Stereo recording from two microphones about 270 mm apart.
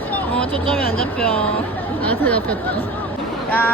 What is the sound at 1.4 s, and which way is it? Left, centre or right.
Speech, left.